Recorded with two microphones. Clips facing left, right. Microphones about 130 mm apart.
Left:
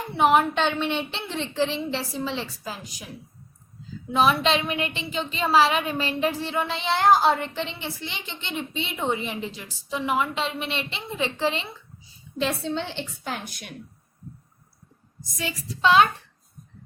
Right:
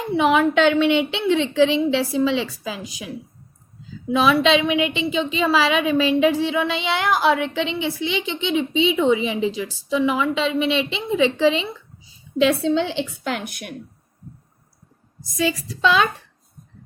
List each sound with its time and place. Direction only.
0.2 s a woman's voice: 90° right
4.1 s a woman's voice: 90° right; by 13.7 s 60° right (ahead or behind)
15.4 s a woman's voice: 90° right